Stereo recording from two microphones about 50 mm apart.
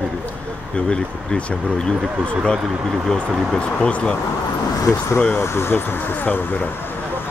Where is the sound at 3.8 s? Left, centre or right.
Left.